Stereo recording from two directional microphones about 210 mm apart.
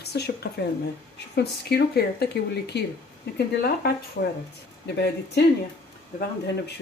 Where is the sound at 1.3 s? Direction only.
50° left (ahead or behind).